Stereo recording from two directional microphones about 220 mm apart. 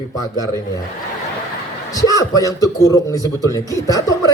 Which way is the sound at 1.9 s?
15° left (ahead or behind).